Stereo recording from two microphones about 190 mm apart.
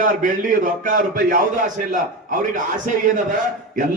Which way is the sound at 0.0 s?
45° right (ahead or behind).